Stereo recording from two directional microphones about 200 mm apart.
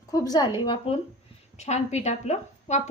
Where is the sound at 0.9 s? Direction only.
30° left (ahead or behind).